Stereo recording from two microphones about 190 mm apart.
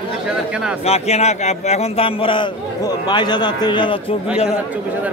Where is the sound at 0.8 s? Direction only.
35° left (ahead or behind).